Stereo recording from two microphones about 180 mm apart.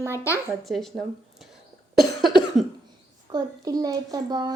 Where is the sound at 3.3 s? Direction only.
20° right (ahead or behind).